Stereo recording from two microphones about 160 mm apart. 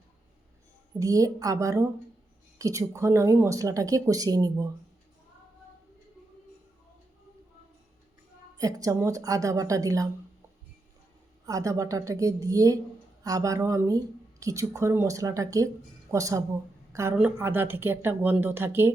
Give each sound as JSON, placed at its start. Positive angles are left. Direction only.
{"t": 0.9, "sound": "speech", "side_deg": -20}
{"t": 8.5, "sound": "speech", "side_deg": -20}
{"t": 11.4, "sound": "a woman's voice", "side_deg": -20}